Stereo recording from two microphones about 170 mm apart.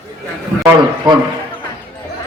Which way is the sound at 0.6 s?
20° right (ahead or behind).